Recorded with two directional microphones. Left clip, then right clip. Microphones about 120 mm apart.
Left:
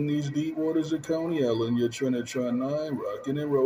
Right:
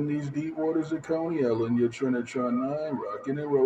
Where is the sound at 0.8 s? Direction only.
30° left (ahead or behind).